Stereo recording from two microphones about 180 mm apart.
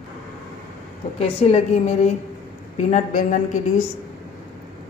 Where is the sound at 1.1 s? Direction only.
35° left (ahead or behind).